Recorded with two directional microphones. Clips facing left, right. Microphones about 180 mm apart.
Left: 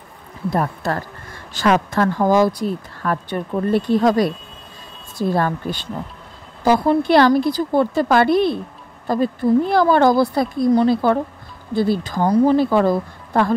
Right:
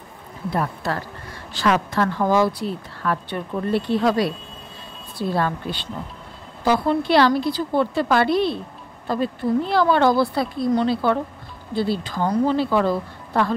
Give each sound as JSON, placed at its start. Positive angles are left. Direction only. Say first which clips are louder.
{"t": 0.5, "sound": "speech", "louder": "left 3 dB", "side_deg": 45}